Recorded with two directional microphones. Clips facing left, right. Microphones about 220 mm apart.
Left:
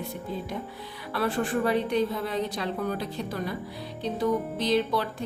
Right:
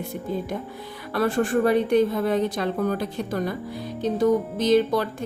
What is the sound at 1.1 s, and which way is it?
Speech, 45° right (ahead or behind).